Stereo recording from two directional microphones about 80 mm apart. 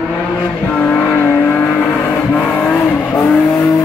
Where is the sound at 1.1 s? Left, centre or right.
Left.